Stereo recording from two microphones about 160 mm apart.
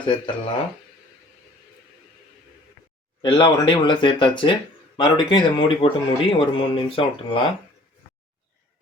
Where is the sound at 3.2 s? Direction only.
30° left (ahead or behind).